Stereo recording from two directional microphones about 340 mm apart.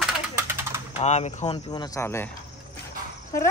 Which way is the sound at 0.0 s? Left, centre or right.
Centre.